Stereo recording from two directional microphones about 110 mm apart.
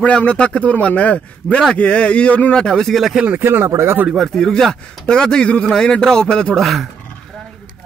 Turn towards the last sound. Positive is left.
turn(degrees=0)  # may be behind; listen again after turning